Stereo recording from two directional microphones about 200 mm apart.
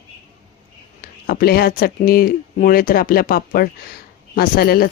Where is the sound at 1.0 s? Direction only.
50° left (ahead or behind).